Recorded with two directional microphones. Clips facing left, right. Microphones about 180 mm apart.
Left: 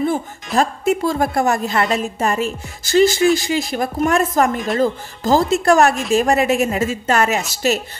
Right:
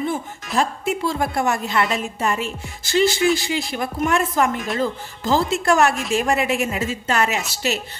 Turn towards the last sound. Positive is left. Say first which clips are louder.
# left 5 dB
turn(degrees=45)  # may be behind; listen again after turning